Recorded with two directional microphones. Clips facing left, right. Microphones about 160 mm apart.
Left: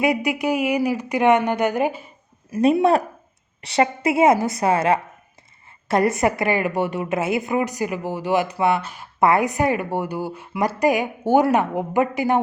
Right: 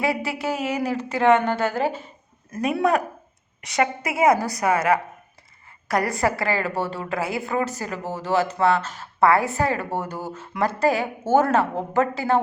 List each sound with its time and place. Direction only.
0.0 s a woman's voice: 15° left (ahead or behind)
3.6 s a woman's voice: 30° left (ahead or behind)